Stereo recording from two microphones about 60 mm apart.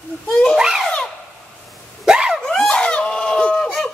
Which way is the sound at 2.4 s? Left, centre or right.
Centre.